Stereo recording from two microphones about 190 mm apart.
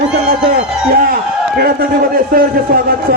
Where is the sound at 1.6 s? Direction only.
50° right (ahead or behind).